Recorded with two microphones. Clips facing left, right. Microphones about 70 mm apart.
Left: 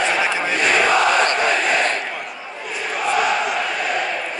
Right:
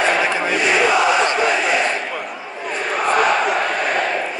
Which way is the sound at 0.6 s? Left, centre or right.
Left.